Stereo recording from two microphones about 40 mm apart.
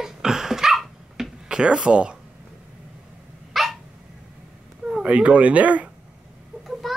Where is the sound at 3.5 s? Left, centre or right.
Centre.